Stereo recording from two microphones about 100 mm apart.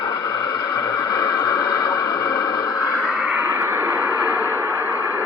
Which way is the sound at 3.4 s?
25° right (ahead or behind).